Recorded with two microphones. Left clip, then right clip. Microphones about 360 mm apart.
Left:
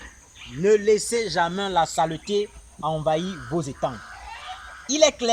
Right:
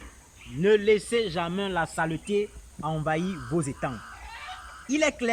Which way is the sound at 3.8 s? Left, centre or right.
Centre.